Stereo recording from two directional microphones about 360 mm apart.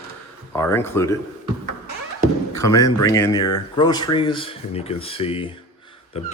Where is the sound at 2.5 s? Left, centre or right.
Centre.